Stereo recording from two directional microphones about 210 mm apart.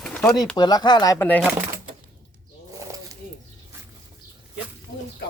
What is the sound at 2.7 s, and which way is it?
Bird, 15° right (ahead or behind).